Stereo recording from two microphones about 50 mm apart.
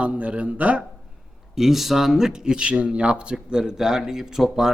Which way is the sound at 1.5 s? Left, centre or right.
Centre.